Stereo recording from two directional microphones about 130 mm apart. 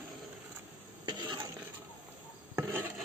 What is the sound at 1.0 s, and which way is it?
Stir, 35° right (ahead or behind).